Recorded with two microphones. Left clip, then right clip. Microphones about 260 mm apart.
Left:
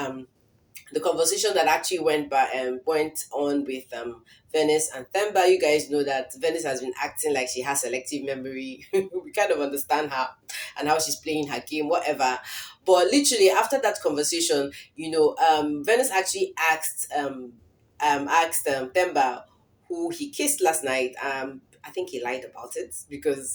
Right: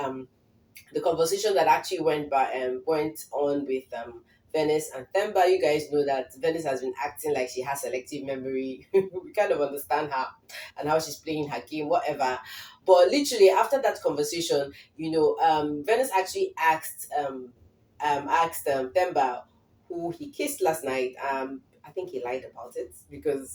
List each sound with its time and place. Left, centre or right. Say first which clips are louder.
0.9 s speech: left 1 dB; left